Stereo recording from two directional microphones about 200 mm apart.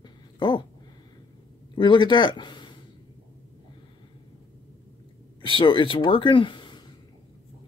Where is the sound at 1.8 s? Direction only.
25° left (ahead or behind).